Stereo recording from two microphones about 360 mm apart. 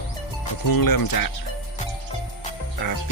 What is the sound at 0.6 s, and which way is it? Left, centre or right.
Speech, left.